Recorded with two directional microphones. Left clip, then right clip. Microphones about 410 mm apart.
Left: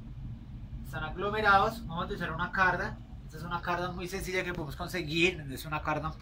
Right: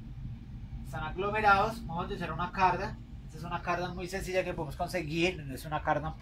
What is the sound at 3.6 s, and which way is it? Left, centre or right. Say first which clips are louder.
Speech: even; centre.